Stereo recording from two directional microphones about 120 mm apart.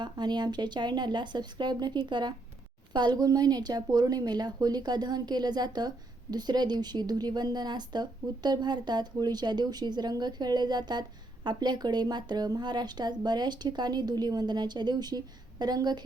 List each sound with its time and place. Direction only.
0.0 s speech: 40° right (ahead or behind)